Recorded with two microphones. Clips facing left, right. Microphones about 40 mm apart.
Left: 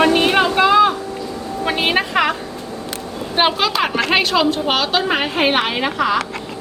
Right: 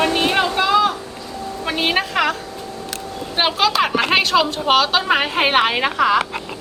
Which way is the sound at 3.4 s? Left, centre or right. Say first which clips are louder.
Even; centre.